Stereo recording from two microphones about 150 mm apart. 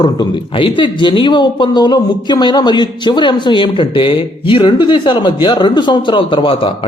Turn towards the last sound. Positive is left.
turn(degrees=35)  # may be behind; listen again after turning